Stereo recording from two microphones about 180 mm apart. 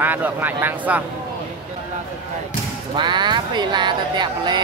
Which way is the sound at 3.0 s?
25° right (ahead or behind).